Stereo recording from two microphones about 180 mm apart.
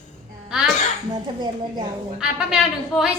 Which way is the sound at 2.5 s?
5° right (ahead or behind).